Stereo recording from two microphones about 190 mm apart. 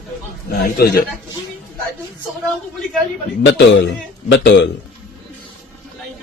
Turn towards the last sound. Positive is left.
turn(degrees=60)  # may be behind; listen again after turning